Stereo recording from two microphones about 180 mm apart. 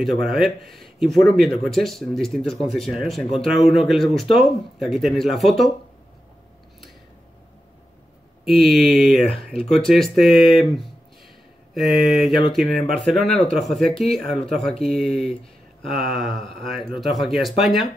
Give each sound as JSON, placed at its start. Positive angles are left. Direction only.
{"t": 0.0, "sound": "speech", "side_deg": 0}
{"t": 8.5, "sound": "speech", "side_deg": 0}
{"t": 12.3, "sound": "a sound", "side_deg": 30}
{"t": 12.5, "sound": "speech", "side_deg": 0}